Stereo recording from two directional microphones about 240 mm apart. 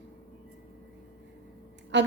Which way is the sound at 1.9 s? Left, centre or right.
Right.